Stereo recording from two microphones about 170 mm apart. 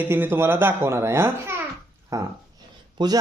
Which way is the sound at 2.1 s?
15° right (ahead or behind).